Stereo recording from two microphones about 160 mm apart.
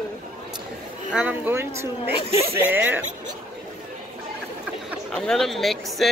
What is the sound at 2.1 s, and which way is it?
Speech, 40° left (ahead or behind).